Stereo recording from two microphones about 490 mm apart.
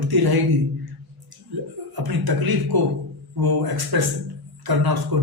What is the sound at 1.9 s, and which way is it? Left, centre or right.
A man's voice, right.